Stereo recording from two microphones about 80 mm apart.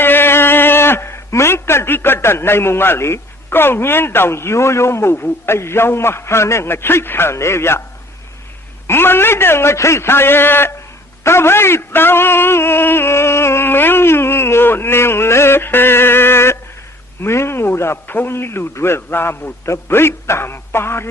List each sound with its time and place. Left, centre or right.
0.0 s a man's voice: left
5.1 s a man's voice: left
8.9 s a man's voice: left